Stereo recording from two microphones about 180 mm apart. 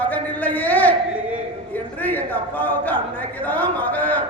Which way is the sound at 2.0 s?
10° left (ahead or behind).